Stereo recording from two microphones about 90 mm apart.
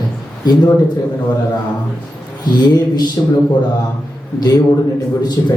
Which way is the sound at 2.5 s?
50° left (ahead or behind).